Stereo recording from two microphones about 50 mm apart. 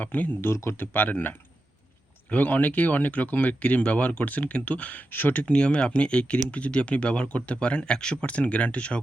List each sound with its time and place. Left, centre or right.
0.0 s speech: left
0.4 s speech: left
0.8 s speech: left